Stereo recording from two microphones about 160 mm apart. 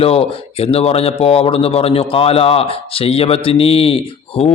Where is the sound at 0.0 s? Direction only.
35° left (ahead or behind).